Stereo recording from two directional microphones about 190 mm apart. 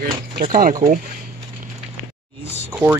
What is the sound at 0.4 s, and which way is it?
Speech, 45° right (ahead or behind).